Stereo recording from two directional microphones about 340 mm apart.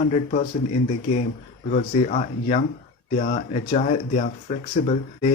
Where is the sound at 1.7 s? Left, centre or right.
Left.